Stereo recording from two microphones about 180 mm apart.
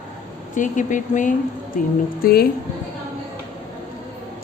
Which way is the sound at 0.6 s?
45° left (ahead or behind).